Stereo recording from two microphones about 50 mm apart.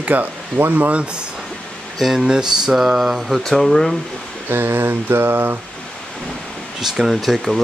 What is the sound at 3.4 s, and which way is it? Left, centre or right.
Speech, centre.